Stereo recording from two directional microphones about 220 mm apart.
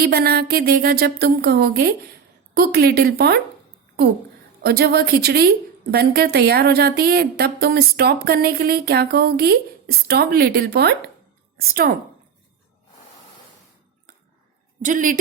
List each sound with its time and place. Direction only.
0.0 s a woman's voice: 45° right (ahead or behind)
4.6 s a woman's voice: 45° right (ahead or behind)
14.8 s speech: 35° right (ahead or behind)